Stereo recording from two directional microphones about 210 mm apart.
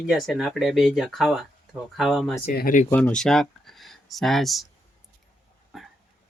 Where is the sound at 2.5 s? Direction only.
40° left (ahead or behind).